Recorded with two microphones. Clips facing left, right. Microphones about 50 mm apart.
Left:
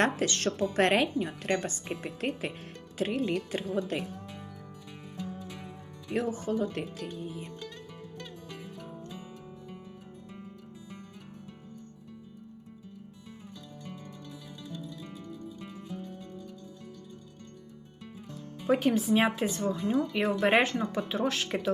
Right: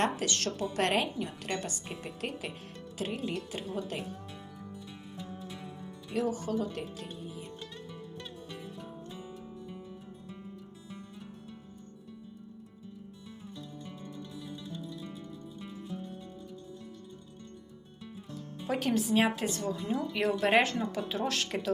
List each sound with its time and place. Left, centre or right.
0.0 s a woman's voice: left
6.3 s a woman's voice: left
18.7 s a woman's voice: centre
19.7 s a woman's voice: left
20.1 s a woman's voice: centre